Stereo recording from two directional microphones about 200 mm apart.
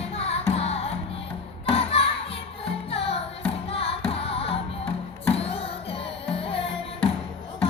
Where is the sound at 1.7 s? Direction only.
30° left (ahead or behind).